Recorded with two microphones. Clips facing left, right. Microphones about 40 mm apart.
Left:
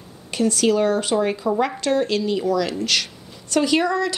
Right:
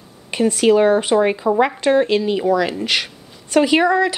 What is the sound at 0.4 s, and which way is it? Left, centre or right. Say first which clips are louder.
A woman's voice: right 5 dB; right.